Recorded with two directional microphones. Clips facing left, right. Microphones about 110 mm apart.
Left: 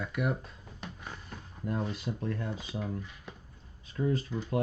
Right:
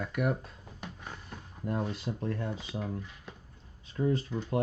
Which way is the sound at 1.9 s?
30° right (ahead or behind).